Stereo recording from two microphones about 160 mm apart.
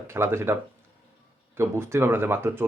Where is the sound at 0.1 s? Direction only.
15° right (ahead or behind).